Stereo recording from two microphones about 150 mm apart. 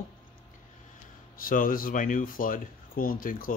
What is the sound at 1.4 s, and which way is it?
Speech, 70° left (ahead or behind).